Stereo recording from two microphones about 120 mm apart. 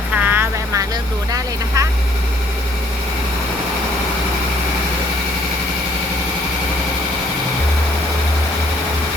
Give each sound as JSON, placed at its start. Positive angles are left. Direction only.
{"t": 0.2, "sound": "vehicle", "side_deg": -15}
{"t": 1.3, "sound": "vehicle", "side_deg": -25}